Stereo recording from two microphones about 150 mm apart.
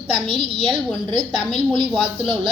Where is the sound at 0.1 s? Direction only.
35° right (ahead or behind).